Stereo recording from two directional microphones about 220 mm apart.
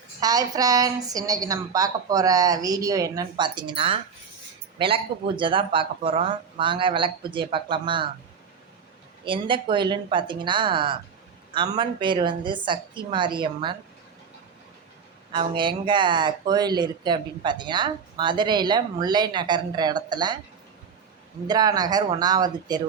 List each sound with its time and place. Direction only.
0.2 s a woman's voice: 15° right (ahead or behind)
9.2 s speech: 25° right (ahead or behind)
15.3 s speech: 20° right (ahead or behind)
21.4 s a woman's voice: 20° right (ahead or behind)